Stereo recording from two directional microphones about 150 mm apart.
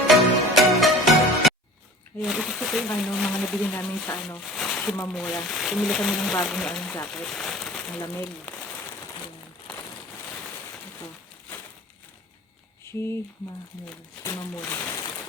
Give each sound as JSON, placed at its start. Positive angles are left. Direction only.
{"t": 0.1, "sound": "music", "side_deg": 0}
{"t": 2.2, "sound": "speech", "side_deg": 0}
{"t": 4.4, "sound": "speech", "side_deg": 0}
{"t": 8.0, "sound": "speech", "side_deg": 15}
{"t": 12.8, "sound": "a sound", "side_deg": 15}
{"t": 14.6, "sound": "speech", "side_deg": 10}